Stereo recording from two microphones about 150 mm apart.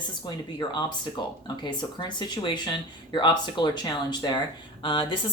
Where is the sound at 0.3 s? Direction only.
30° left (ahead or behind).